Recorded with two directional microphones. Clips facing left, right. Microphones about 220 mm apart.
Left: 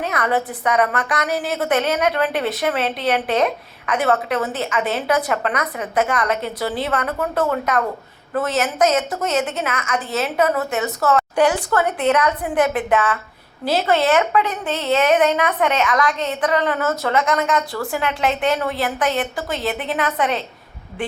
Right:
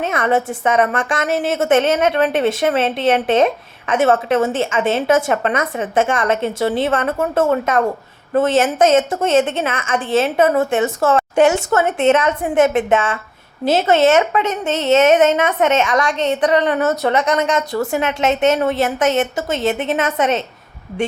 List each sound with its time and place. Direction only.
0.0 s a woman's voice: 25° right (ahead or behind)